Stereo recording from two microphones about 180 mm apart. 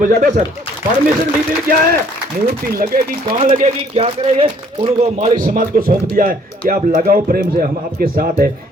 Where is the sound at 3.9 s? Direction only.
30° right (ahead or behind).